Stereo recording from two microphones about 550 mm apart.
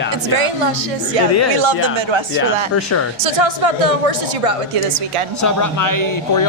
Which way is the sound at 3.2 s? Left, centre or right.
Right.